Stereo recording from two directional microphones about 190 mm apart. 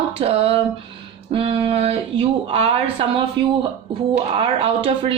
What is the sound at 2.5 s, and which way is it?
Speech, 30° right (ahead or behind).